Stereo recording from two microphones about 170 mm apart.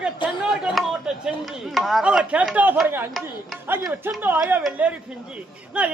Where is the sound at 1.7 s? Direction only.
Centre (ahead or behind).